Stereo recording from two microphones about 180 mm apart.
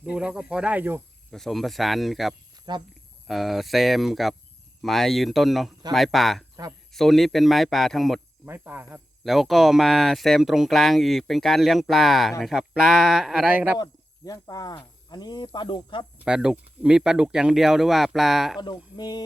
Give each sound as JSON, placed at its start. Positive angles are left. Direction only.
{"t": 0.0, "sound": "speech", "side_deg": -5}
{"t": 1.3, "sound": "speech", "side_deg": 0}
{"t": 2.7, "sound": "speech", "side_deg": -25}
{"t": 3.2, "sound": "speech", "side_deg": 0}
{"t": 8.4, "sound": "speech", "side_deg": -10}
{"t": 9.2, "sound": "speech", "side_deg": 0}
{"t": 13.7, "sound": "speech", "side_deg": 20}
{"t": 16.1, "sound": "speech", "side_deg": -5}
{"t": 18.9, "sound": "speech", "side_deg": 25}